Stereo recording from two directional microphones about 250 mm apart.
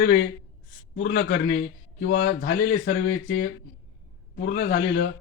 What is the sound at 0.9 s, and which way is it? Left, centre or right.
A man's voice, left.